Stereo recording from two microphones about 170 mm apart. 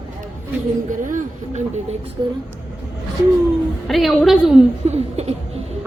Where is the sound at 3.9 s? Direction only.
Centre (ahead or behind).